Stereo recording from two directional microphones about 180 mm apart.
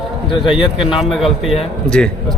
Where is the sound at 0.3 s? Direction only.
25° left (ahead or behind).